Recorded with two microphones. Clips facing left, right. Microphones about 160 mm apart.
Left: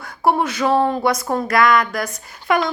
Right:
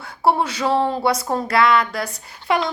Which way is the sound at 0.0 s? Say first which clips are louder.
Left 1 dB; 30° right (ahead or behind).